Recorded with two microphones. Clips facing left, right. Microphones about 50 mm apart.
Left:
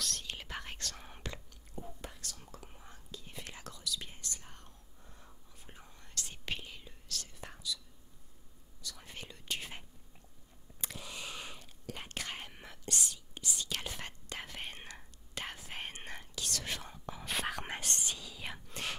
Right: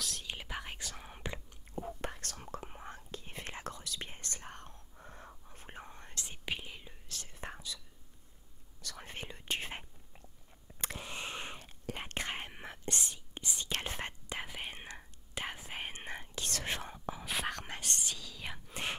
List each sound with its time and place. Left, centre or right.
0.0 s whispering: centre
1.8 s whispering: right
6.1 s whispering: centre; by 7.8 s right
8.8 s whispering: right
11.0 s whispering: right
14.3 s whispering: centre
16.3 s whispering: right
17.0 s whispering: centre
17.6 s whispering: centre
18.3 s whispering: centre
18.7 s whispering: right